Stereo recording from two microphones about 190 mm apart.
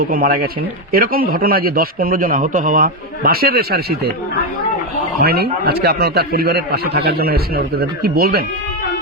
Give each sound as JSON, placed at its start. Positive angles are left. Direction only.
{"t": 0.0, "sound": "a man's voice", "side_deg": -50}
{"t": 5.2, "sound": "a man's voice", "side_deg": -55}